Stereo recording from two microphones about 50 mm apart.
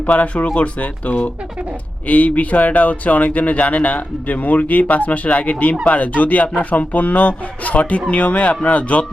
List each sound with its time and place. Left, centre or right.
0.0 s speech: left